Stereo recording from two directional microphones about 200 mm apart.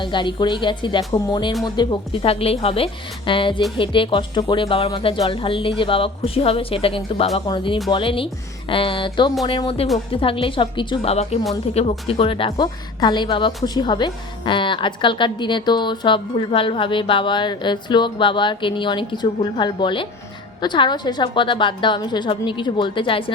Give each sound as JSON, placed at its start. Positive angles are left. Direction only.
{"t": 0.0, "sound": "a woman's voice", "side_deg": 25}